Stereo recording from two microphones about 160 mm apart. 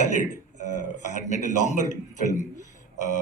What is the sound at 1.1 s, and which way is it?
Speech, 50° left (ahead or behind).